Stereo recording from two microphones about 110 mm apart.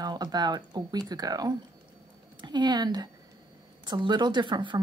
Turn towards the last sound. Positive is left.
turn(degrees=-45)  # may be behind; listen again after turning